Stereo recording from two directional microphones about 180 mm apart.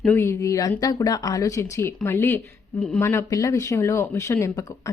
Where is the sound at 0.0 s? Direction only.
10° left (ahead or behind).